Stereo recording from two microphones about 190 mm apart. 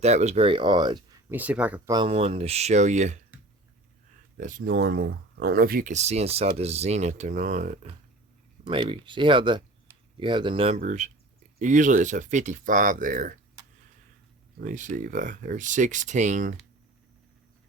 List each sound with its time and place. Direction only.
0.0 s speech: 35° right (ahead or behind)
1.3 s speech: 10° right (ahead or behind)
1.9 s speech: 25° right (ahead or behind)
4.4 s speech: 45° right (ahead or behind)
8.6 s speech: 30° right (ahead or behind); by 13.4 s 45° right (ahead or behind)
14.6 s speech: 40° right (ahead or behind)